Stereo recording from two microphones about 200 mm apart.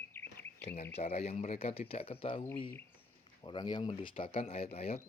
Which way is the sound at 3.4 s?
20° left (ahead or behind).